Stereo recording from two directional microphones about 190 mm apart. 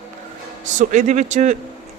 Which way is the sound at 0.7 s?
40° right (ahead or behind).